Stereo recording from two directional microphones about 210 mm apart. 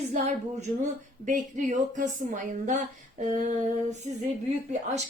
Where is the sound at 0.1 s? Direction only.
35° right (ahead or behind).